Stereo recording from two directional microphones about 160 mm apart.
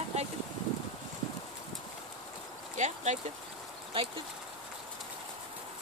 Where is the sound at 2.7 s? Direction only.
45° right (ahead or behind).